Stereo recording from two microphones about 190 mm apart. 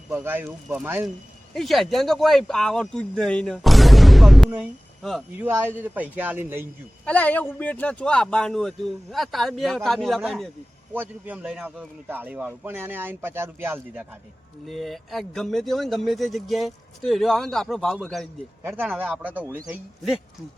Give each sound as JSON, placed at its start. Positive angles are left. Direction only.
{"t": 0.1, "sound": "a man's voice", "side_deg": -10}
{"t": 7.0, "sound": "a man's voice", "side_deg": 10}
{"t": 14.7, "sound": "speech", "side_deg": 0}
{"t": 18.8, "sound": "a man's voice", "side_deg": -10}
{"t": 19.6, "sound": "speech", "side_deg": 0}